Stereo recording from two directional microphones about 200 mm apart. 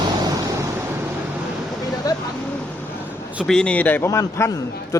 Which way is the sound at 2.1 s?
15° left (ahead or behind).